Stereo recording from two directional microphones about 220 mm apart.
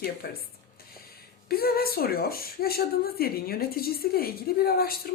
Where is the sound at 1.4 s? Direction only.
45° left (ahead or behind).